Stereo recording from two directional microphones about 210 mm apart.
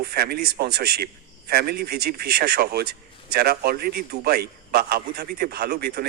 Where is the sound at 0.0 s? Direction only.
50° right (ahead or behind).